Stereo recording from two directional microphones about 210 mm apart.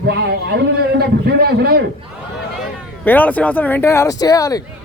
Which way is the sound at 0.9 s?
50° right (ahead or behind).